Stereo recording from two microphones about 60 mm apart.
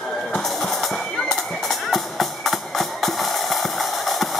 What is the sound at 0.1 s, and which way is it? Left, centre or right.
Music, centre.